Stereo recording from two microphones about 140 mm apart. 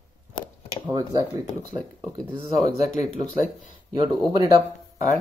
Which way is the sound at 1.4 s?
55° left (ahead or behind).